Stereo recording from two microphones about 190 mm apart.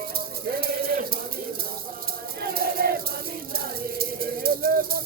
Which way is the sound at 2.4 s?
50° right (ahead or behind).